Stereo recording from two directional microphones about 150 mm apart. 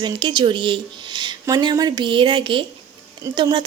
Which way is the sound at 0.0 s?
30° right (ahead or behind).